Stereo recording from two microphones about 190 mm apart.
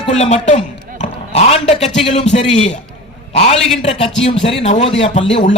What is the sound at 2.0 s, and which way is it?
A man's voice, 35° left (ahead or behind).